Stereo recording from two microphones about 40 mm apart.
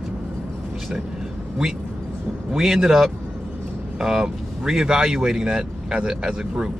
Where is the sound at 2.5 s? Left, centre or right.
Centre.